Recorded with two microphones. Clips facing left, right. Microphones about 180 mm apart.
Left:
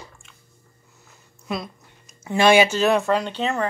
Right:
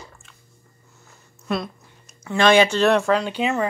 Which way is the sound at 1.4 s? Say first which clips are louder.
Right 3 dB; centre (ahead or behind).